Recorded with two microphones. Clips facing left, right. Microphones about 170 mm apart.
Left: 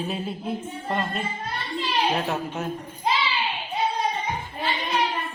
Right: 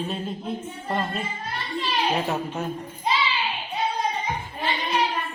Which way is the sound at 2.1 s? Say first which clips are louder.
Right 1 dB; 10° right (ahead or behind).